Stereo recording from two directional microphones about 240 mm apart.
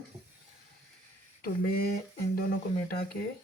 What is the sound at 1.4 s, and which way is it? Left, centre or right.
Speech, left.